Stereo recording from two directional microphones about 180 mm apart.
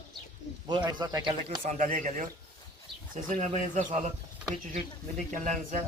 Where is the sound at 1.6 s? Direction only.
45° right (ahead or behind).